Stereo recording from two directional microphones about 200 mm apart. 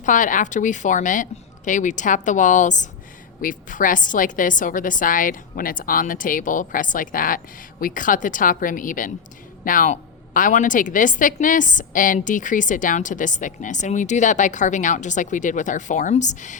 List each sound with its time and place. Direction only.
0.0 s a woman's voice: 40° left (ahead or behind)